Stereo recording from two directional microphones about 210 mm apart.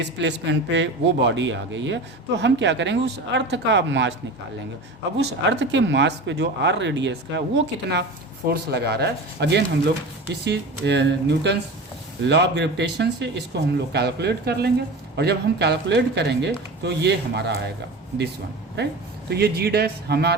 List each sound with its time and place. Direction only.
0.0 s a man's voice: 55° right (ahead or behind)
5.1 s a man's voice: 60° right (ahead or behind)
18.8 s speech: 50° right (ahead or behind)